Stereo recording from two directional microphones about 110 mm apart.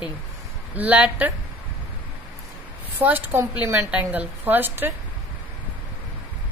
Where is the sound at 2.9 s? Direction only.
15° right (ahead or behind).